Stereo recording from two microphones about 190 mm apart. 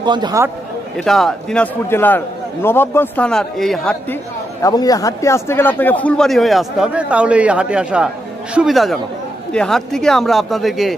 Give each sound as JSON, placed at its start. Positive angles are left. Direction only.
{"t": 0.0, "sound": "a man's voice", "side_deg": -25}
{"t": 0.9, "sound": "a man's voice", "side_deg": 0}
{"t": 4.6, "sound": "speech", "side_deg": 20}